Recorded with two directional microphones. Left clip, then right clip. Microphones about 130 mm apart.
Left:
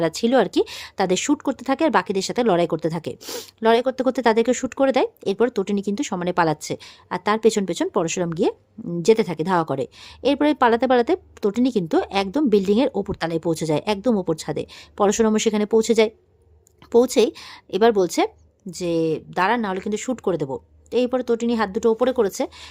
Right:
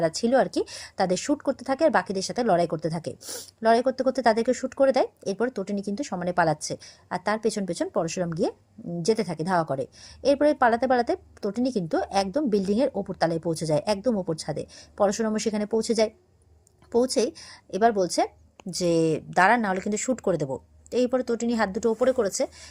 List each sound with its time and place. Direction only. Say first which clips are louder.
0.0 s speech: left 3 dB; 35° left (ahead or behind)
18.7 s speech: left 1 dB; centre (ahead or behind); by 22.7 s 35° left (ahead or behind)